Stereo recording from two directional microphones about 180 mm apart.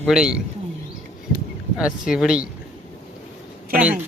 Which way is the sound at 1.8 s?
5° right (ahead or behind).